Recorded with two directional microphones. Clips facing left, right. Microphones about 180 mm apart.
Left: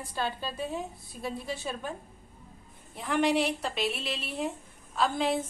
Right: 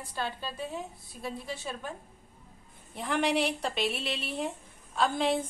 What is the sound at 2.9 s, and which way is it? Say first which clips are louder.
A woman's voice: left 2 dB; centre (ahead or behind).